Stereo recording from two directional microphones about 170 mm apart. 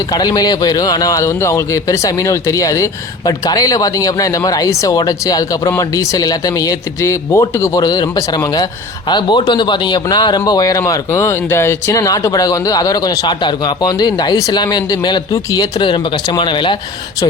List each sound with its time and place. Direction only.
0.1 s speech: 20° left (ahead or behind)